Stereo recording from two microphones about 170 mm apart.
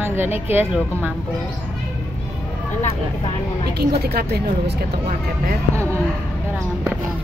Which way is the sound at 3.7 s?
70° right (ahead or behind).